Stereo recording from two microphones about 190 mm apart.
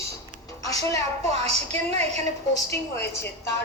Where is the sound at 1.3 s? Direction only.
35° right (ahead or behind).